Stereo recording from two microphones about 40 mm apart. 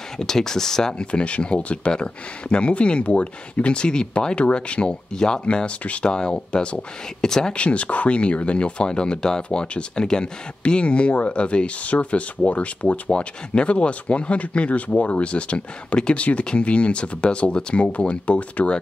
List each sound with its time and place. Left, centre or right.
0.2 s speech: centre
1.1 s speech: left
7.2 s speech: centre
7.5 s speech: left